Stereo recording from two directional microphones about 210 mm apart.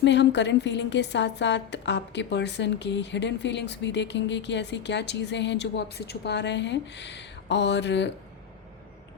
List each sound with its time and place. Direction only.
0.0 s a woman's voice: 55° left (ahead or behind)